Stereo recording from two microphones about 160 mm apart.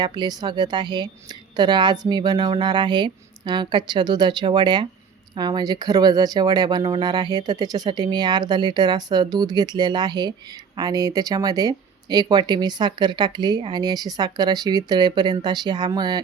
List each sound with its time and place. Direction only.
0.0 s speech: 25° right (ahead or behind)